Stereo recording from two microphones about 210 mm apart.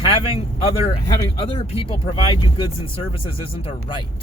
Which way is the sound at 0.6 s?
30° left (ahead or behind).